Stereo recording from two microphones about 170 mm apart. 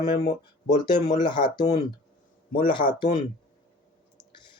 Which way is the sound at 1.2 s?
25° left (ahead or behind).